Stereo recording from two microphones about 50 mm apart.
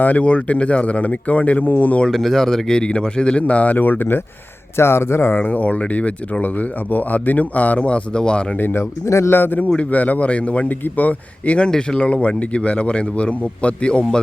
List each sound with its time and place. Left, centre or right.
0.0 s a man's voice: left
2.0 s speech: centre; by 4.2 s left
4.8 s speech: left
5.4 s speech: left
8.5 s speech: left
8.8 s speech: left
9.3 s a man's voice: left